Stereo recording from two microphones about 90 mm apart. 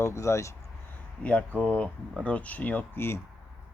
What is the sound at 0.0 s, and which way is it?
Speech, 35° left (ahead or behind).